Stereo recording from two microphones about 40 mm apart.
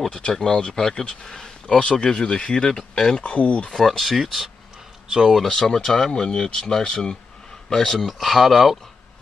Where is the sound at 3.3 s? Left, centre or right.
Left.